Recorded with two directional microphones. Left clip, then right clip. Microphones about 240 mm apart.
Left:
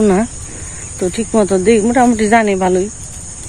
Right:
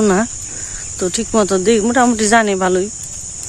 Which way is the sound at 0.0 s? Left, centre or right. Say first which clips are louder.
Left 1 dB; right.